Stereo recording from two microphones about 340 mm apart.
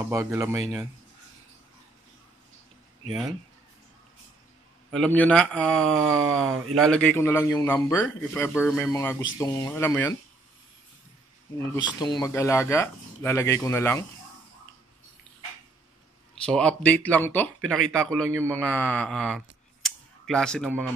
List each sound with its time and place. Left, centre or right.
0.0 s speech: centre
4.9 s speech: centre
6.0 s speech: right
6.9 s speech: centre
11.5 s speech: centre
16.4 s speech: centre